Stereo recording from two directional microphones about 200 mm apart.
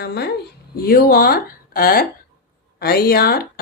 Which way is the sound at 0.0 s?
55° left (ahead or behind).